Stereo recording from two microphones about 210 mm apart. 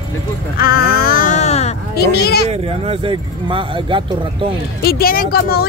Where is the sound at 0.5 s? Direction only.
45° left (ahead or behind).